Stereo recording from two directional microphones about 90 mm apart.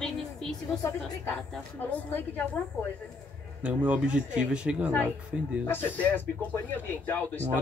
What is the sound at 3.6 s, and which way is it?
Speech, 15° right (ahead or behind).